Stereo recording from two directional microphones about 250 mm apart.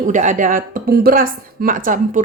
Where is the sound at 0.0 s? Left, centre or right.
Right.